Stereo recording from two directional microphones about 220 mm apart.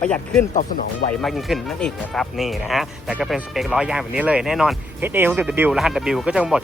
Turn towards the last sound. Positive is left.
turn(degrees=-5)  # may be behind; listen again after turning